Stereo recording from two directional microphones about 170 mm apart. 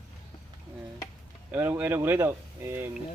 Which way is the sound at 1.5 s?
10° right (ahead or behind).